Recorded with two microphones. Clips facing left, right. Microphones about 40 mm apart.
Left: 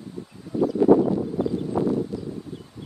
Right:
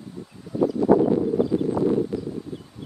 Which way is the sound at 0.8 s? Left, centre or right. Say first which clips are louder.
Left 3 dB; left.